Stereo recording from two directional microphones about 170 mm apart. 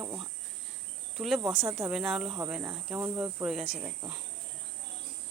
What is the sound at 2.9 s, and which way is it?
Speech, 15° right (ahead or behind).